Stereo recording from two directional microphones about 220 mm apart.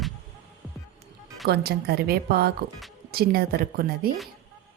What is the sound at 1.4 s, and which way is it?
A woman's voice, 45° right (ahead or behind).